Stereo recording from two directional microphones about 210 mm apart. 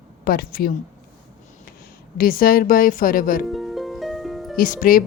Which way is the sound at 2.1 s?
40° left (ahead or behind).